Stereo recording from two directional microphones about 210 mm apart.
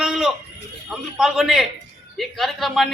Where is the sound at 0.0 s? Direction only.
Centre (ahead or behind).